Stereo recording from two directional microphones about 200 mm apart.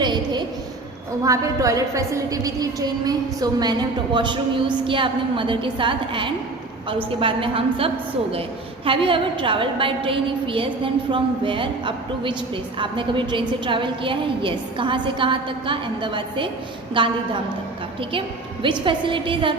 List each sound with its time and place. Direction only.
0.0 s a sound: 20° right (ahead or behind)
1.2 s a woman's voice: 15° right (ahead or behind)
18.6 s a woman's voice: 25° right (ahead or behind)